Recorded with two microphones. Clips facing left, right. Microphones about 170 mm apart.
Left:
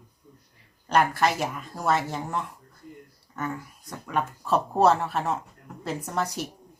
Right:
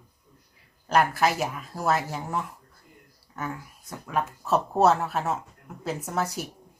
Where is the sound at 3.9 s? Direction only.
Centre (ahead or behind).